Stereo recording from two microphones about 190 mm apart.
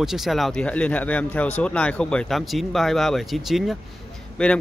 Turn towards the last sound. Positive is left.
turn(degrees=5)  # may be behind; listen again after turning